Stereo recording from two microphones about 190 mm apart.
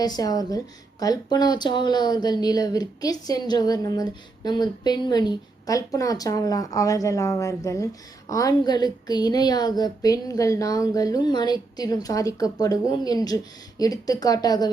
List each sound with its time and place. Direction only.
0.0 s a woman's voice: 20° left (ahead or behind)